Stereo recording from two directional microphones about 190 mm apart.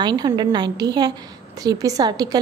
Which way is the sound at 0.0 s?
20° right (ahead or behind).